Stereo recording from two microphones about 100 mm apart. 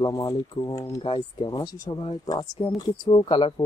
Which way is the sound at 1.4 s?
40° left (ahead or behind).